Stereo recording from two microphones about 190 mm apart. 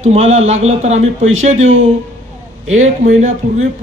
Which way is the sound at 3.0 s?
40° right (ahead or behind).